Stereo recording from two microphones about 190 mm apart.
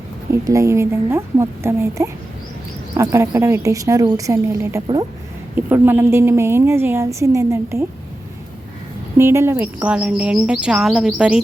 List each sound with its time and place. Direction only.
0.3 s a woman's voice: 15° right (ahead or behind)
9.1 s speech: 15° right (ahead or behind)